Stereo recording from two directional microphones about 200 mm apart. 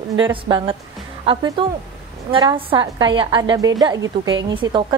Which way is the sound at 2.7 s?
20° right (ahead or behind).